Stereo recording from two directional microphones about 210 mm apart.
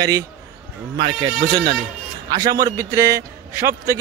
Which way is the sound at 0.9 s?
25° right (ahead or behind).